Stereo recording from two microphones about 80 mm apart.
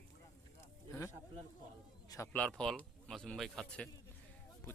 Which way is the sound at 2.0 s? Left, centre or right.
Left.